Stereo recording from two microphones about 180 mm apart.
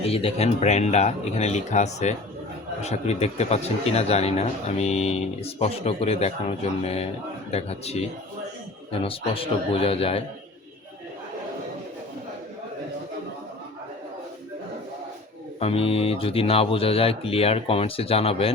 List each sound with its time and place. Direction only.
0.0 s a man's voice: 35° left (ahead or behind)
15.6 s a man's voice: 30° left (ahead or behind)